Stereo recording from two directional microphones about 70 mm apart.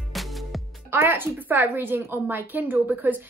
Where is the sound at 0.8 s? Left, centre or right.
Right.